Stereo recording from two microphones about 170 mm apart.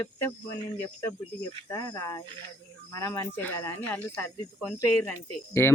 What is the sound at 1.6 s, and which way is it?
Speech, 20° left (ahead or behind).